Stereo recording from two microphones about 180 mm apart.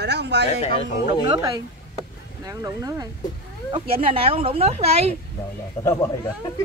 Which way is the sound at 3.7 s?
30° right (ahead or behind).